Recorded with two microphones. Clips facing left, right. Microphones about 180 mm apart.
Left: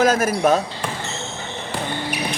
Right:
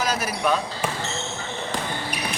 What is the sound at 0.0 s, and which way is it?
Speech, 50° left (ahead or behind).